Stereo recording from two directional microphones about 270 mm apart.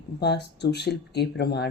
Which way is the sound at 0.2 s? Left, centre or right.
Left.